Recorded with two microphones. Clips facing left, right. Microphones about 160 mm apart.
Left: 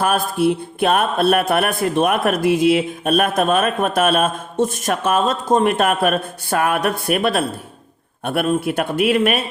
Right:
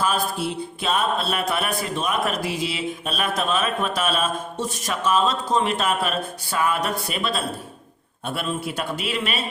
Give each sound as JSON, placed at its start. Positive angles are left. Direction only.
{"t": 0.0, "sound": "speech", "side_deg": 55}